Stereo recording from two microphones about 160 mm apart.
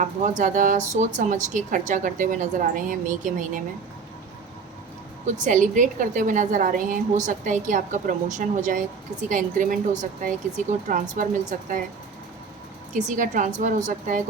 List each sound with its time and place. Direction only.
0.0 s a woman's voice: 50° right (ahead or behind)
5.2 s a woman's voice: 50° right (ahead or behind)
12.9 s a woman's voice: 50° right (ahead or behind)